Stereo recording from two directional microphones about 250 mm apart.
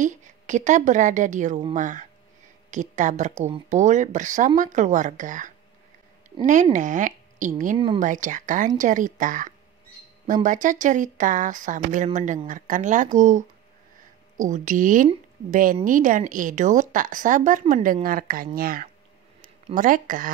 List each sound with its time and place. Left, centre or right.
0.0 s a woman's voice: right